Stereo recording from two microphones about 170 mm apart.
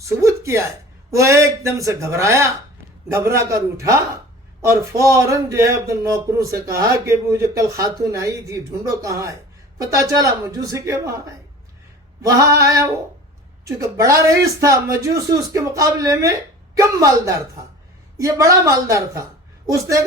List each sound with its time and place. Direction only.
0.2 s speech: 15° right (ahead or behind)
12.2 s speech: 20° right (ahead or behind)
18.6 s speech: 15° right (ahead or behind)